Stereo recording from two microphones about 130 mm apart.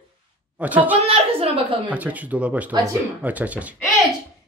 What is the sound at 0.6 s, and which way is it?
Speech, 10° right (ahead or behind).